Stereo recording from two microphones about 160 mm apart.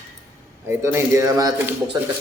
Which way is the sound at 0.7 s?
15° right (ahead or behind).